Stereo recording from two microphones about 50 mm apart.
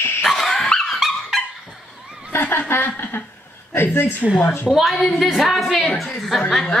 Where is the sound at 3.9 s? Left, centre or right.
Left.